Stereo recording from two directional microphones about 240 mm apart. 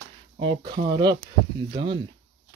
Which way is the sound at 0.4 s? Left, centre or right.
Centre.